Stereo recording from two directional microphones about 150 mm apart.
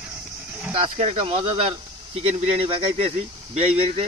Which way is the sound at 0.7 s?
40° right (ahead or behind).